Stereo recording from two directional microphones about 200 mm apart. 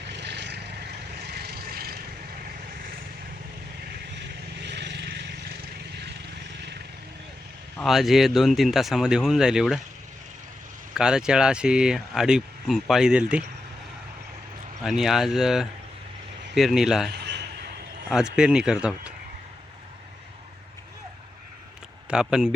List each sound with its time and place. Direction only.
0.1 s vehicle: 60° right (ahead or behind)
4.6 s vehicle: 60° right (ahead or behind)
7.8 s speech: centre (ahead or behind)
10.9 s speech: 5° right (ahead or behind)
14.8 s speech: centre (ahead or behind)
17.1 s a sound: 55° right (ahead or behind)
18.1 s speech: 5° right (ahead or behind)
22.1 s speech: 5° right (ahead or behind)